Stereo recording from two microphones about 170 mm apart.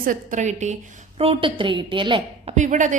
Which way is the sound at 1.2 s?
35° right (ahead or behind).